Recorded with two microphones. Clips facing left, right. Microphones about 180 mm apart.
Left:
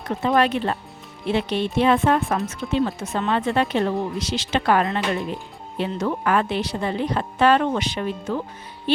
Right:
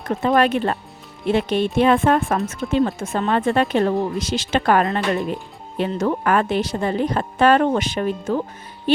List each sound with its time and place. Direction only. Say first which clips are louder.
0.2 s a woman's voice: right 2 dB; 50° right (ahead or behind)